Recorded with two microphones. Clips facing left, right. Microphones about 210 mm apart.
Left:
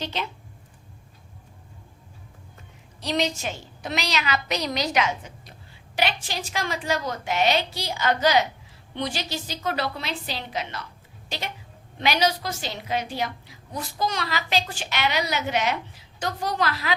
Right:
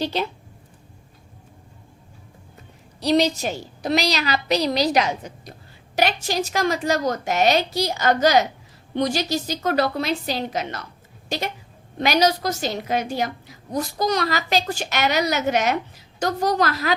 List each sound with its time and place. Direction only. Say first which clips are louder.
0.0 s a woman's voice: right 7 dB; 35° right (ahead or behind)
3.0 s a woman's voice: right 7 dB; 35° right (ahead or behind)